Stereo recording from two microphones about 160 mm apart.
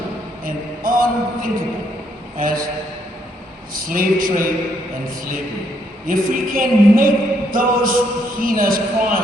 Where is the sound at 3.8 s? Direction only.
60° right (ahead or behind).